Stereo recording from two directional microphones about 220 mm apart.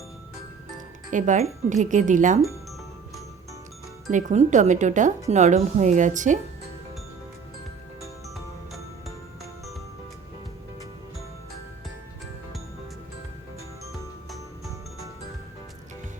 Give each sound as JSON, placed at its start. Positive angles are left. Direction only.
{"t": 1.1, "sound": "speech", "side_deg": -35}
{"t": 4.1, "sound": "speech", "side_deg": -35}